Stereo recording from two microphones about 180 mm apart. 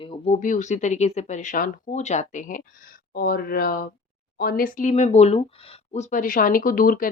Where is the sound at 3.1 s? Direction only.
55° left (ahead or behind).